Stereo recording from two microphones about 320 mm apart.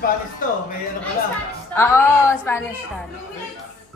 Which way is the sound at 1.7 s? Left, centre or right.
Centre.